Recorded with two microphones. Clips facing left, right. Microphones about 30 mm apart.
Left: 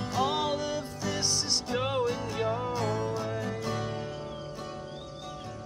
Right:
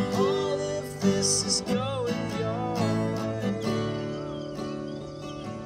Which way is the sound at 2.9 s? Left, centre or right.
Right.